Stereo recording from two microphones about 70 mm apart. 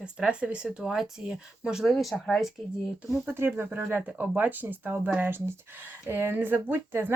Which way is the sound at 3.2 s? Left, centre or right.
Right.